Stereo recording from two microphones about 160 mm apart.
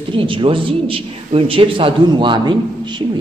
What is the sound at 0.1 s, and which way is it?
A man's voice, 35° right (ahead or behind).